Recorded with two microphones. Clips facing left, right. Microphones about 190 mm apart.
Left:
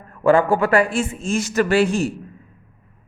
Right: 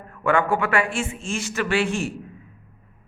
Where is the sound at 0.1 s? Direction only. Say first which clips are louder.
Left 6 dB; 35° left (ahead or behind).